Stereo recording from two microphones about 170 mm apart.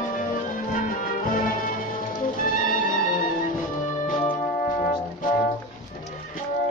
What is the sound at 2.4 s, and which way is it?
Music, 50° left (ahead or behind).